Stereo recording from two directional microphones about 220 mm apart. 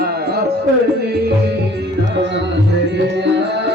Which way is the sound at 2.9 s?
50° right (ahead or behind).